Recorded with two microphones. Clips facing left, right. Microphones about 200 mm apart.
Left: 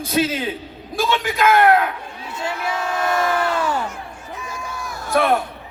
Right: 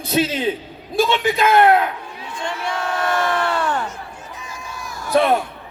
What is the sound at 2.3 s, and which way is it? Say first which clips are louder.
Speech: left 1 dB; 5° left (ahead or behind).